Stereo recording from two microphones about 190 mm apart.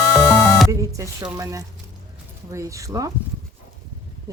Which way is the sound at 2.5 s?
15° right (ahead or behind).